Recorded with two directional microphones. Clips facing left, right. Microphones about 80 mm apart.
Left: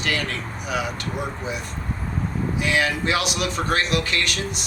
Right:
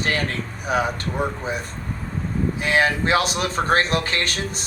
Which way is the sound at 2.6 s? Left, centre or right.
Right.